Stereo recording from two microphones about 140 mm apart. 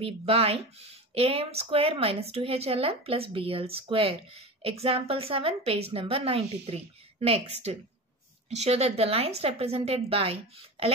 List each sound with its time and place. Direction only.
0.0 s a woman's voice: 45° right (ahead or behind)